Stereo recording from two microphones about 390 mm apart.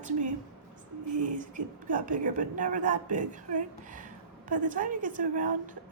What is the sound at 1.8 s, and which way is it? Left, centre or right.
A woman's voice, centre.